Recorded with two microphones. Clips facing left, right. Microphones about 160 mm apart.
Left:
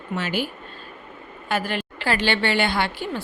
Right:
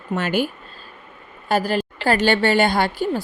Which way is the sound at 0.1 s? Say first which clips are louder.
Right 5 dB; 50° right (ahead or behind).